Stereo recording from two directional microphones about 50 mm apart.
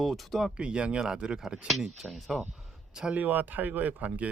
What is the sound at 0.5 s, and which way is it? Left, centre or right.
Speech, right.